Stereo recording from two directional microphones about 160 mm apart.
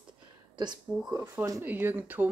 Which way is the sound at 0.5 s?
25° right (ahead or behind).